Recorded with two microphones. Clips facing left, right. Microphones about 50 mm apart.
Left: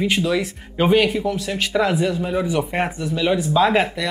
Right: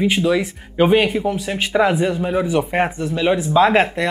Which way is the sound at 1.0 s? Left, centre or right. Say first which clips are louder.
Right 1 dB; right.